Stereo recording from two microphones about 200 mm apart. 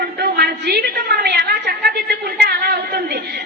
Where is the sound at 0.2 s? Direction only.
55° right (ahead or behind).